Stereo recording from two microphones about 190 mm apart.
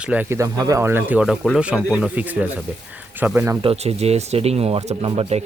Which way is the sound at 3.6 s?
35° right (ahead or behind).